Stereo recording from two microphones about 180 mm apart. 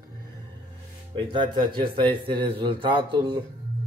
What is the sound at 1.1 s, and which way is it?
A man's voice, 25° right (ahead or behind).